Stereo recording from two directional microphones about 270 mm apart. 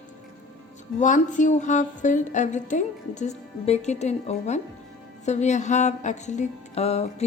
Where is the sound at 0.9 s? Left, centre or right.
Left.